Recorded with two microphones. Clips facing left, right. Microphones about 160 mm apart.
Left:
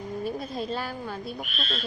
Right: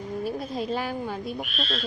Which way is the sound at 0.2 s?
5° right (ahead or behind).